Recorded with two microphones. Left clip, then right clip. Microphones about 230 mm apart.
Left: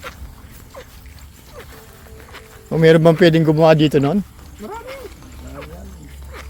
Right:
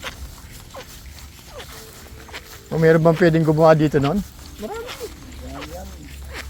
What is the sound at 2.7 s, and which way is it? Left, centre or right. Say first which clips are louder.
Speech: left 4 dB; left.